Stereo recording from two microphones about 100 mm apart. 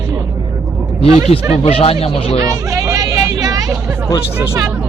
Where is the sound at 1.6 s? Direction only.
70° left (ahead or behind); by 2.3 s 85° left.